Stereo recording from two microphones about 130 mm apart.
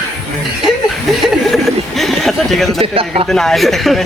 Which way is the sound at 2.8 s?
50° right (ahead or behind).